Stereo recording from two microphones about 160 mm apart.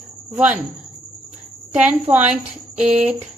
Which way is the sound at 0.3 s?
10° right (ahead or behind).